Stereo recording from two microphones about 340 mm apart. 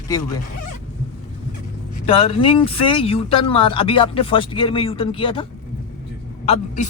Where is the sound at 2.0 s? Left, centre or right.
Centre.